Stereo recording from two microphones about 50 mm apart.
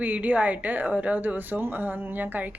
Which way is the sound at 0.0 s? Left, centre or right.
Right.